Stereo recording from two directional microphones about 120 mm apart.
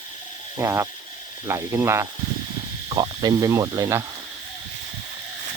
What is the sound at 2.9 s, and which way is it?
Speech, 35° right (ahead or behind).